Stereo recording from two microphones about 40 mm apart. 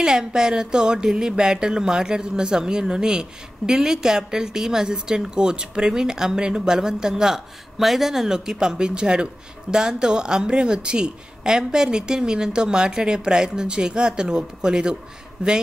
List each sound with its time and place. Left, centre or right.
0.0 s speech: centre